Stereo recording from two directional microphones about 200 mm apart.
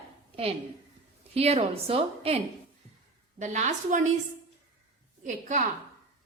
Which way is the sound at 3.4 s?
35° right (ahead or behind).